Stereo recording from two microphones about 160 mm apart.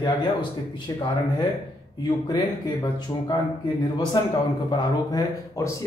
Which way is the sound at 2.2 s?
25° left (ahead or behind).